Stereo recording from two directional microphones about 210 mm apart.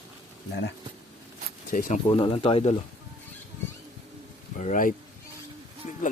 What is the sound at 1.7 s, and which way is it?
Speech, 40° left (ahead or behind).